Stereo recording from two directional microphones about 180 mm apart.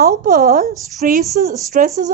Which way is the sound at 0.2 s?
50° right (ahead or behind).